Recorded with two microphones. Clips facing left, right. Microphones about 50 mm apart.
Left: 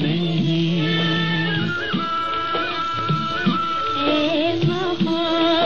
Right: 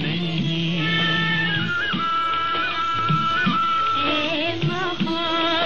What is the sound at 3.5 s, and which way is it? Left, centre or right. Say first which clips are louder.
Music: right 1 dB; centre.